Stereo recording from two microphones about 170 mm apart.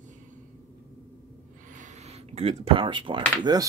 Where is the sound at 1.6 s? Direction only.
45° right (ahead or behind); by 3.2 s 30° right (ahead or behind).